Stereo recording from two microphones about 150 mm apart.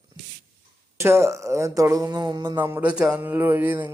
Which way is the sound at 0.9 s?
20° right (ahead or behind).